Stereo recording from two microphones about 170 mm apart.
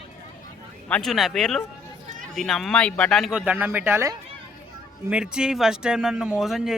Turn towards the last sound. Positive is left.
turn(degrees=0)  # may be behind; listen again after turning